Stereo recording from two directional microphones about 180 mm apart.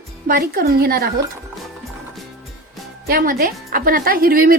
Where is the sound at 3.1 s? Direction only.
55° right (ahead or behind).